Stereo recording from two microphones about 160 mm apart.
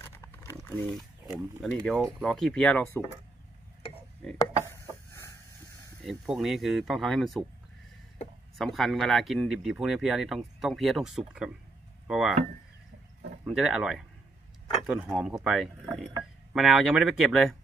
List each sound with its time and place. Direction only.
0.8 s speech: centre (ahead or behind)
2.3 s speech: 5° left (ahead or behind)
5.1 s a sound: 20° left (ahead or behind)
6.0 s speech: centre (ahead or behind)
8.5 s speech: centre (ahead or behind)
13.5 s speech: 5° right (ahead or behind)